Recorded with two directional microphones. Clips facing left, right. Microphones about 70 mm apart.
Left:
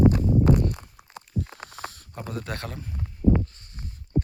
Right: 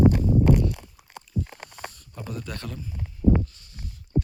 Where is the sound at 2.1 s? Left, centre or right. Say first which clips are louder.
Left 2 dB; left.